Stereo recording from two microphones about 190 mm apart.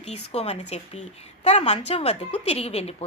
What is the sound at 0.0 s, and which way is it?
A woman's voice, 35° left (ahead or behind).